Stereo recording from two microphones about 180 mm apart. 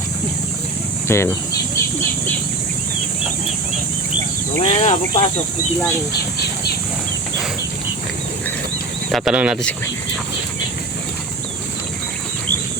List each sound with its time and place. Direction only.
1.0 s speech: 15° left (ahead or behind)
4.6 s speech: 35° left (ahead or behind)
9.1 s speech: 5° right (ahead or behind)